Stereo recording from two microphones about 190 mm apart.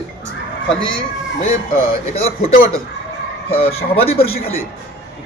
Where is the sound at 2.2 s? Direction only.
30° left (ahead or behind).